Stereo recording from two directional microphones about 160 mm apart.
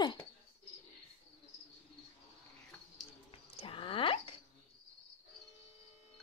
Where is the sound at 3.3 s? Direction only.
35° left (ahead or behind).